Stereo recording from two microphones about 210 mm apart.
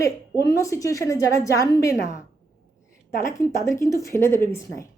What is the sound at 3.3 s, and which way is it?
A woman's voice, 15° left (ahead or behind).